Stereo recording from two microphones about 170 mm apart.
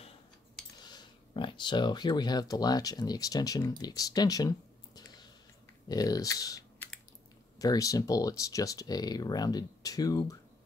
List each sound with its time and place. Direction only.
0.7 s speech: 25° left (ahead or behind)